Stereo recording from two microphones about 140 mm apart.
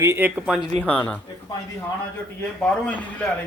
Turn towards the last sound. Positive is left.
turn(degrees=10)  # may be behind; listen again after turning